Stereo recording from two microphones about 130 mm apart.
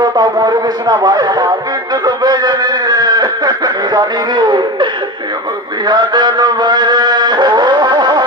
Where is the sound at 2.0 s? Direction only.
30° right (ahead or behind).